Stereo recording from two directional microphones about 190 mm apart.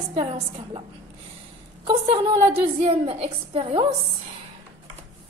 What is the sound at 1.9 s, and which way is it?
A woman's voice, 30° right (ahead or behind).